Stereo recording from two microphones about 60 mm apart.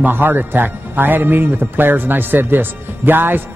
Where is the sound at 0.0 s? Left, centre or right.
Right.